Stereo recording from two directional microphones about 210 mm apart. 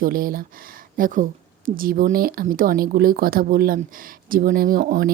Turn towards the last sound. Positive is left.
turn(degrees=-40)  # may be behind; listen again after turning